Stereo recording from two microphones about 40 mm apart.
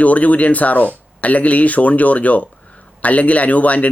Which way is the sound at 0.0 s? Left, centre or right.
Left.